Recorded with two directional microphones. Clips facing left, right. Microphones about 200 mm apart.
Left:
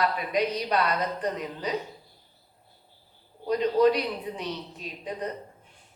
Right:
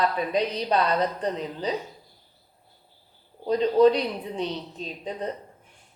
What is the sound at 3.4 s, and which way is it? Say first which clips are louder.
Speech: right 3 dB; 30° right (ahead or behind).